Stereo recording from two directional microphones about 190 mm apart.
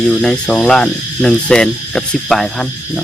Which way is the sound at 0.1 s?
5° left (ahead or behind).